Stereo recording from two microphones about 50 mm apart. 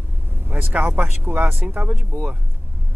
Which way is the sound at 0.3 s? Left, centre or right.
Right.